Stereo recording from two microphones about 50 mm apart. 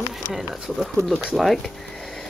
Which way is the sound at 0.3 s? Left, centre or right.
Centre.